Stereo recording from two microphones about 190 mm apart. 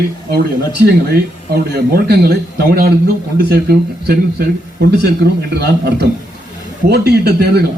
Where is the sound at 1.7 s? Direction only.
50° right (ahead or behind).